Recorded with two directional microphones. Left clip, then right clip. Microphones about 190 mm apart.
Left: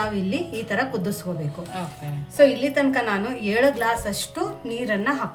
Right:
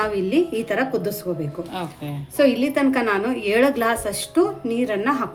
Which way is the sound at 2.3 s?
30° right (ahead or behind).